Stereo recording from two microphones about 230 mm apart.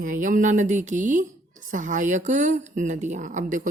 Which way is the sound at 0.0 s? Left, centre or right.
Right.